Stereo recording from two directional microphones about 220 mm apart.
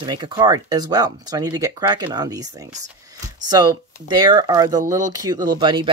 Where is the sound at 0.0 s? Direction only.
20° right (ahead or behind).